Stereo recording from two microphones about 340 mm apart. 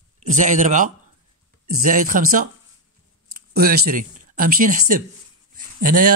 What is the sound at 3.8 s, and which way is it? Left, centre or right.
Speech, right.